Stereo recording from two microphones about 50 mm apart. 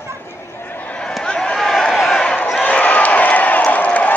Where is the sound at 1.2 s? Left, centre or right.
Centre.